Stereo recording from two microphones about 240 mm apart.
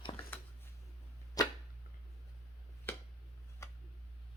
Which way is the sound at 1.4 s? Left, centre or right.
Centre.